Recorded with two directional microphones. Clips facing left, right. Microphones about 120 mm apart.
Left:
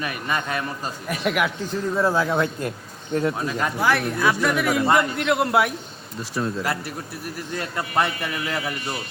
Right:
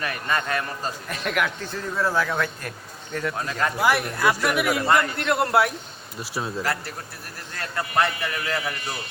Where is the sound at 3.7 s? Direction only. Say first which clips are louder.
Even; 5° right (ahead or behind).